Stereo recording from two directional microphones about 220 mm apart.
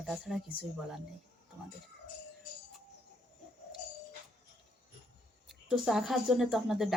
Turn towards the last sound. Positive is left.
turn(degrees=0)  # may be behind; listen again after turning